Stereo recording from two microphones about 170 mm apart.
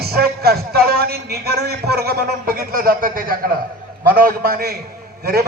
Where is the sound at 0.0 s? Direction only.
65° right (ahead or behind).